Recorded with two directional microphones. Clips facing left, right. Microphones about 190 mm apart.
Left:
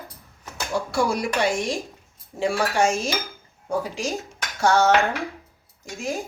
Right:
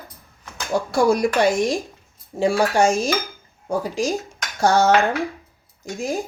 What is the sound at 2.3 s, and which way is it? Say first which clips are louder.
Speech: right 4 dB; 35° right (ahead or behind).